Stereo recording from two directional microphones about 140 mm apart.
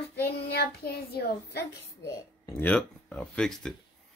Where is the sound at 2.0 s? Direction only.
20° left (ahead or behind).